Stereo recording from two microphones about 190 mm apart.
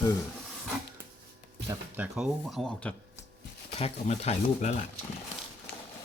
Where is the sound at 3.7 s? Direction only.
35° left (ahead or behind).